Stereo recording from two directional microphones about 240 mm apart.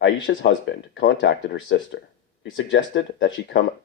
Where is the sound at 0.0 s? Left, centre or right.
Left.